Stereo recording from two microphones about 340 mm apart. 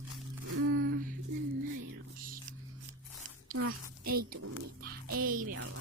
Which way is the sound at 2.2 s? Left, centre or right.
Right.